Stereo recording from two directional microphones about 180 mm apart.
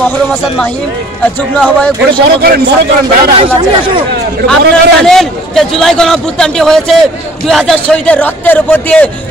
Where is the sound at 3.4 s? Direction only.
30° right (ahead or behind).